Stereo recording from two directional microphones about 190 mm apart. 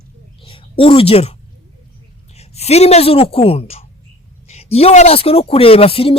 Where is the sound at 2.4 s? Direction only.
35° left (ahead or behind).